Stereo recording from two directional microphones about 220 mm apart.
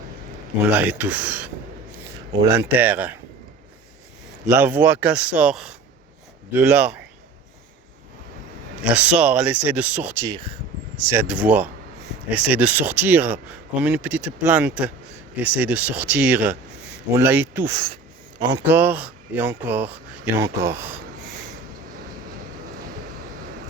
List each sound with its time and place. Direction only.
0.7 s speech: 5° right (ahead or behind)
2.5 s speech: 10° right (ahead or behind)
4.5 s speech: 10° right (ahead or behind)
8.8 s speech: 5° right (ahead or behind)
10.2 s speech: 20° right (ahead or behind)
11.1 s speech: 5° right (ahead or behind)
17.8 s speech: 20° right (ahead or behind)